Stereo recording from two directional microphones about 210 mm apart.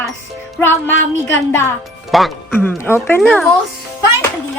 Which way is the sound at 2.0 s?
Centre (ahead or behind).